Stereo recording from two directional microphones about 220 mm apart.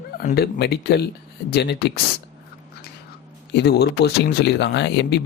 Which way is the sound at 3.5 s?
50° left (ahead or behind).